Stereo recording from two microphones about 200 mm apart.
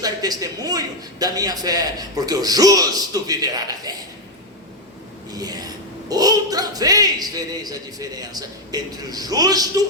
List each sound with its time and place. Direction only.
0.0 s speech: 20° right (ahead or behind)
5.3 s speech: 20° right (ahead or behind)